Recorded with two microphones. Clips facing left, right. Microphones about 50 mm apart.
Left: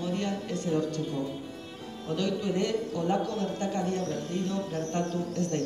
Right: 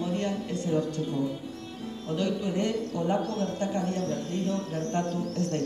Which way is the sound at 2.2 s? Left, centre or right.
Centre.